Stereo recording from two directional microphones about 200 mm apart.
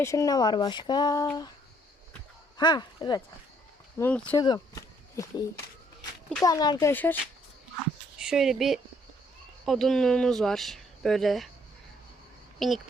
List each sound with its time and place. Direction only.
0.0 s speech: 15° left (ahead or behind)
2.6 s speech: 20° left (ahead or behind)
3.9 s speech: 10° left (ahead or behind)
6.4 s speech: 20° left (ahead or behind)
6.9 s speech: 10° left (ahead or behind)
8.2 s speech: 5° right (ahead or behind)
12.5 s speech: centre (ahead or behind)